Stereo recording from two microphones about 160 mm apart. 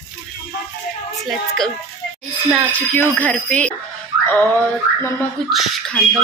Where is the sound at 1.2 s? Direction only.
Centre (ahead or behind).